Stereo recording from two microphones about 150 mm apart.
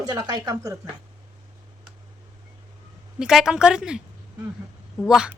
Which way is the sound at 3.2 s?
5° right (ahead or behind).